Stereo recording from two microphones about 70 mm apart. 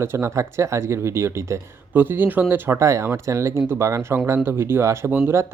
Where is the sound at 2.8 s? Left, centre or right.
Right.